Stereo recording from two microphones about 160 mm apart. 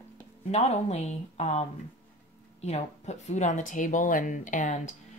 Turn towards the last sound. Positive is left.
turn(degrees=50)  # may be behind; listen again after turning